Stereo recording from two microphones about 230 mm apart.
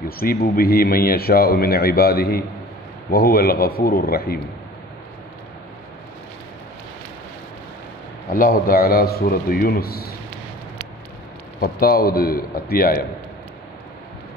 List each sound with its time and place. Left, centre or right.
0.2 s a man's voice: left
8.3 s a man's voice: left
11.6 s a man's voice: left